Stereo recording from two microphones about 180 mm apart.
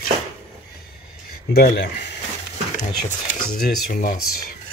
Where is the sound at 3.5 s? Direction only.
55° left (ahead or behind).